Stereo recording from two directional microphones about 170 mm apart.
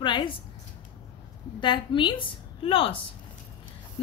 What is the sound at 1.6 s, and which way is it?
A woman's voice, 30° left (ahead or behind).